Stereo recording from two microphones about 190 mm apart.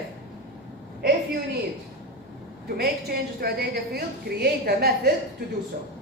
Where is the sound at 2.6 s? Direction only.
55° right (ahead or behind).